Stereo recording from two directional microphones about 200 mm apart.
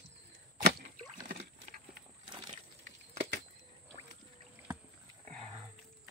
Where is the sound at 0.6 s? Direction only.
50° right (ahead or behind).